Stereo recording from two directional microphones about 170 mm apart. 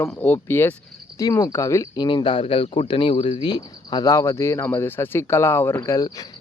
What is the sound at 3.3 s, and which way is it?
Speech, 25° left (ahead or behind).